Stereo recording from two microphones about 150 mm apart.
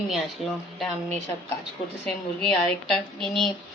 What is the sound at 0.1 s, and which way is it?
Speech, centre (ahead or behind).